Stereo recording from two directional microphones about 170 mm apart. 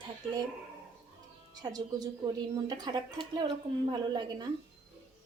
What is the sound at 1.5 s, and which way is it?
A woman's voice, 25° right (ahead or behind).